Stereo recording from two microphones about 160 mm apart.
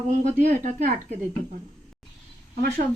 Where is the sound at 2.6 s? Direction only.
75° right (ahead or behind).